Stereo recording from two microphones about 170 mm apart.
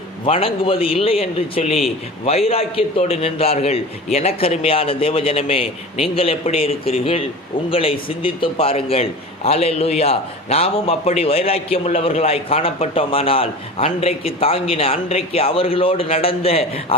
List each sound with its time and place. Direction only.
0.3 s a man's voice: 35° left (ahead or behind)